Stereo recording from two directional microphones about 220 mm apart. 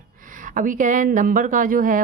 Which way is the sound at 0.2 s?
35° right (ahead or behind).